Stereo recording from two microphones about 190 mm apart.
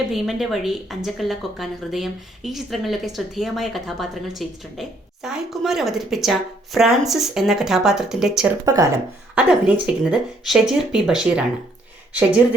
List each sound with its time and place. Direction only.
0.1 s a woman's voice: centre (ahead or behind)
8.6 s speech: 20° right (ahead or behind)
9.3 s a woman's voice: 5° right (ahead or behind)